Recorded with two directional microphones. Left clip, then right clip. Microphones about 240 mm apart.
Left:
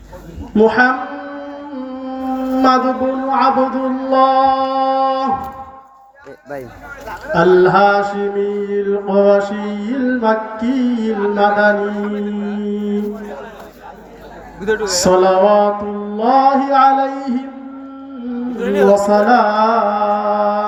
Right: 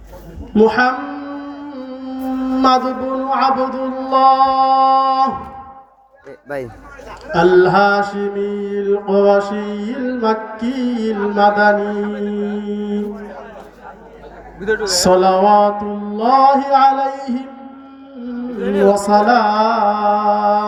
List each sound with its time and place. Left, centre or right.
0.5 s music: right
7.3 s mantra: right
14.6 s a man's voice: centre
14.9 s mantra: right
18.6 s speech: left
18.9 s mantra: right